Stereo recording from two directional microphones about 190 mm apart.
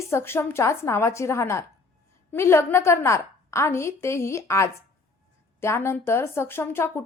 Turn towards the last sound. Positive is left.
turn(degrees=10)  # may be behind; listen again after turning